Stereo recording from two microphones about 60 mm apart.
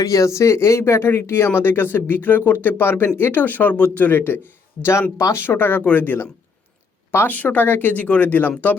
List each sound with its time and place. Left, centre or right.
0.0 s speech: left
4.8 s speech: left
5.3 s a woman's voice: left
7.3 s speech: left